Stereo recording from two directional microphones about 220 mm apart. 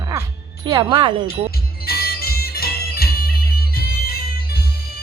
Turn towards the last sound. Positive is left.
turn(degrees=45)  # may be behind; listen again after turning